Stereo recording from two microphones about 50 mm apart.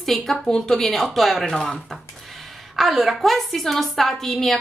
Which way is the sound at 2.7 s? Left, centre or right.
Centre.